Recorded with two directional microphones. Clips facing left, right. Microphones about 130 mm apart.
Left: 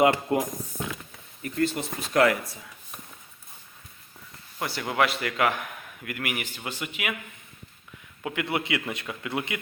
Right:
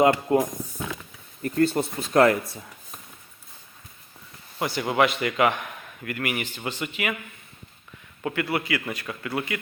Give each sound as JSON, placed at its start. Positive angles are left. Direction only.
{"t": 0.0, "sound": "speech", "side_deg": -25}
{"t": 1.4, "sound": "speech", "side_deg": -40}
{"t": 4.6, "sound": "a man's voice", "side_deg": 0}
{"t": 8.2, "sound": "a man's voice", "side_deg": 10}
{"t": 8.4, "sound": "a man's voice", "side_deg": 25}